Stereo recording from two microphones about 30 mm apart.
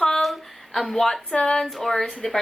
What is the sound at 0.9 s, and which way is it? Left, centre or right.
Speech, centre.